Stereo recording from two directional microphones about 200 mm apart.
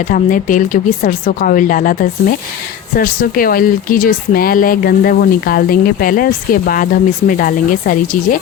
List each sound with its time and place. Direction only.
0.1 s speech: 40° left (ahead or behind)